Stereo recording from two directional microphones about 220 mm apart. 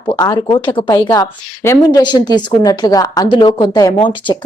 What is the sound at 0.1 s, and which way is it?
A woman's voice, 20° left (ahead or behind).